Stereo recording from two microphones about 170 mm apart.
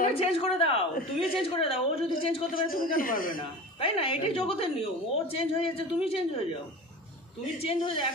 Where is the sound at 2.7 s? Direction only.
55° left (ahead or behind).